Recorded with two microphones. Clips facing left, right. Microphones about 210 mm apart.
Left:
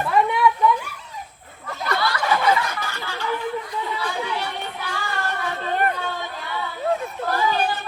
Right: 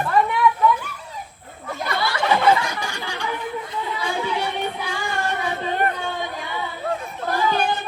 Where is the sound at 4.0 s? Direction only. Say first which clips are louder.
Right 5 dB; 15° right (ahead or behind).